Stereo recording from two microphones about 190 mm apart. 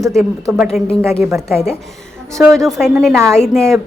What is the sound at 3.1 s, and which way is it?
Speech, 15° right (ahead or behind).